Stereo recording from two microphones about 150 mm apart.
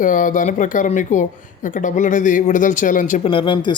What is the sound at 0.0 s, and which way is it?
Speech, 60° left (ahead or behind).